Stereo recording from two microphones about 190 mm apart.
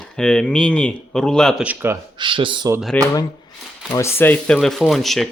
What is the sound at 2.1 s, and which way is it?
Speech, 25° right (ahead or behind).